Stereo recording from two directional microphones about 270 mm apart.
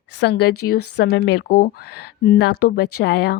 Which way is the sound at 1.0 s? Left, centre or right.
Left.